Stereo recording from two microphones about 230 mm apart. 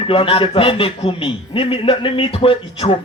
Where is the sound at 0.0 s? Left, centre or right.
Left.